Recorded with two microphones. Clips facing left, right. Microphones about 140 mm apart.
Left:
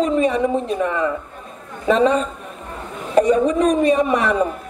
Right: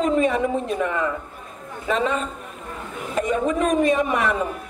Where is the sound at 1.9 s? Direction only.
35° left (ahead or behind).